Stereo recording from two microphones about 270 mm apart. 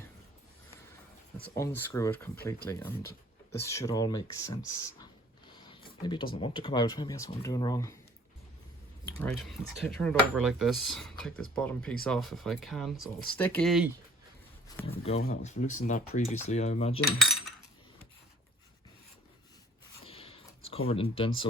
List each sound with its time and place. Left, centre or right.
1.5 s speech: centre
6.0 s speech: centre
9.1 s speech: centre
14.8 s speech: left
17.2 s cutlery: centre
20.1 s a sound: left
20.7 s speech: left